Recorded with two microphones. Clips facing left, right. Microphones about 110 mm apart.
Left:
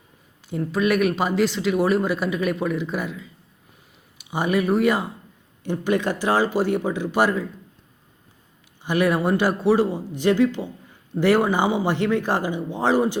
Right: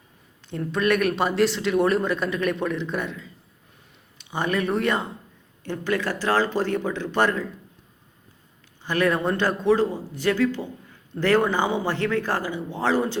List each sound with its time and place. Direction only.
0.5 s speech: 5° left (ahead or behind)
8.8 s speech: 15° left (ahead or behind)